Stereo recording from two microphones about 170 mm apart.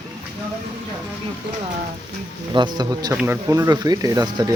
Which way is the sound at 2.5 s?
25° right (ahead or behind).